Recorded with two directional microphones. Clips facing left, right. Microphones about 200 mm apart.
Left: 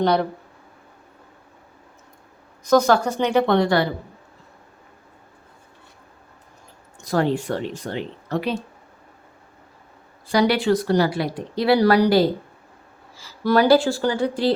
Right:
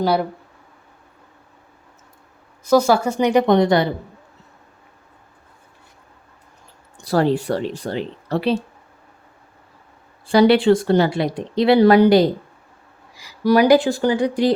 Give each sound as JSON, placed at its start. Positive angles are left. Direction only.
{"t": 0.0, "sound": "speech", "side_deg": -5}
{"t": 2.6, "sound": "speech", "side_deg": -10}
{"t": 7.0, "sound": "speech", "side_deg": -35}
{"t": 10.3, "sound": "speech", "side_deg": -30}